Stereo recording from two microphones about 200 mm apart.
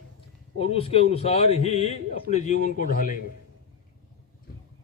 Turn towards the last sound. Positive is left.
turn(degrees=45)  # may be behind; listen again after turning